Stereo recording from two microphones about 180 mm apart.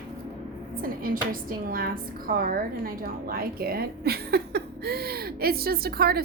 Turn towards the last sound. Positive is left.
turn(degrees=-55)  # may be behind; listen again after turning